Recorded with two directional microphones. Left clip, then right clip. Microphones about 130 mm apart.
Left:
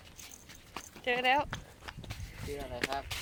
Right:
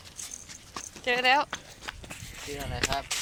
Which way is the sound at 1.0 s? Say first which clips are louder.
Right 5 dB; centre (ahead or behind).